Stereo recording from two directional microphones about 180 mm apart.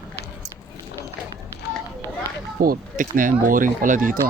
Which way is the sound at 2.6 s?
50° right (ahead or behind).